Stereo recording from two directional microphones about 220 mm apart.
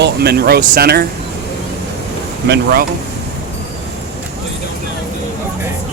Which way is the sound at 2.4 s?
45° right (ahead or behind).